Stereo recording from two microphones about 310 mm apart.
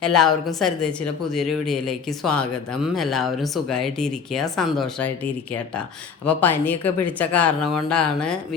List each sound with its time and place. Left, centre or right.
0.0 s speech: centre
6.2 s speech: centre